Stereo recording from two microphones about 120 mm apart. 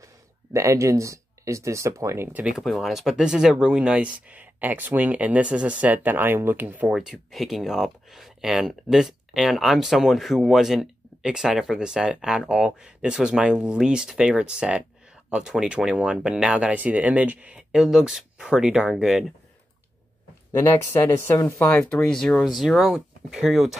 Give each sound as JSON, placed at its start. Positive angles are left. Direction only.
{"t": 0.0, "sound": "speech", "side_deg": -25}
{"t": 2.4, "sound": "speech", "side_deg": -5}
{"t": 6.9, "sound": "speech", "side_deg": -5}
{"t": 20.5, "sound": "speech", "side_deg": 20}